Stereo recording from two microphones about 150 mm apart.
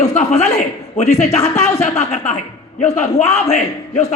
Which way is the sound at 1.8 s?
45° left (ahead or behind).